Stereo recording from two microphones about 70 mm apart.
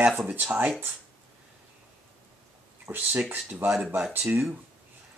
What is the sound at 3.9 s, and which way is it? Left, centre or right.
Speech, right.